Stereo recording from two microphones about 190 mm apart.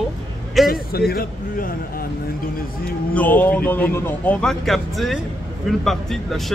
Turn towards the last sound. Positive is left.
turn(degrees=0)  # may be behind; listen again after turning